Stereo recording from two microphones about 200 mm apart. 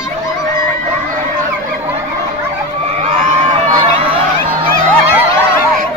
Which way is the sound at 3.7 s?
25° right (ahead or behind).